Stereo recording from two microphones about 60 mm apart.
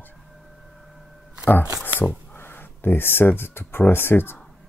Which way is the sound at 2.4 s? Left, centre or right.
Left.